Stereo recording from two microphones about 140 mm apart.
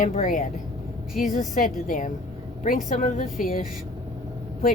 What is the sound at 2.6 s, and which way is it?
A woman's voice, 70° left (ahead or behind).